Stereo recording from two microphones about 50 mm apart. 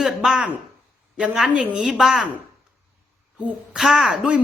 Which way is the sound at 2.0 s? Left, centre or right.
Centre.